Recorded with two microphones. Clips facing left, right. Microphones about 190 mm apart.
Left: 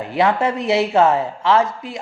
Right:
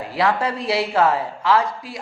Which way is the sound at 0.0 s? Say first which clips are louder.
Left 3 dB; 20° left (ahead or behind).